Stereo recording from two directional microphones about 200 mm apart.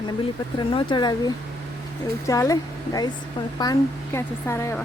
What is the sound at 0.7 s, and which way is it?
Speech, 25° left (ahead or behind).